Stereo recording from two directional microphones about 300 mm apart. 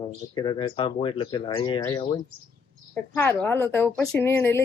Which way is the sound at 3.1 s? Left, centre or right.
Centre.